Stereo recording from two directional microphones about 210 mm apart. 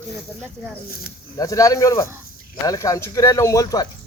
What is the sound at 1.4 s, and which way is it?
Speech, 15° left (ahead or behind).